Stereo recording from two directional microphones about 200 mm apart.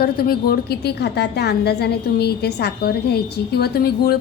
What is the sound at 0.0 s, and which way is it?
A woman's voice, 50° left (ahead or behind).